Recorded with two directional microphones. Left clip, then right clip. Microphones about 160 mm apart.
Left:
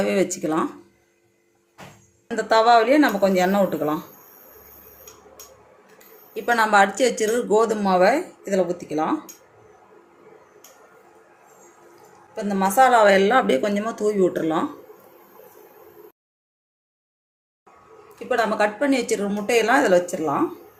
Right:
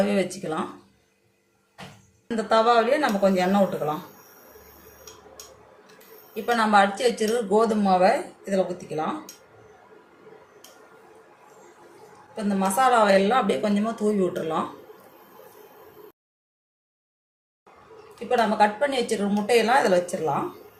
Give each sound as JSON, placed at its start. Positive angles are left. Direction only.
{"t": 0.0, "sound": "speech", "side_deg": 60}
{"t": 2.3, "sound": "speech", "side_deg": 60}
{"t": 6.3, "sound": "speech", "side_deg": 65}
{"t": 12.4, "sound": "speech", "side_deg": 55}
{"t": 18.3, "sound": "speech", "side_deg": 55}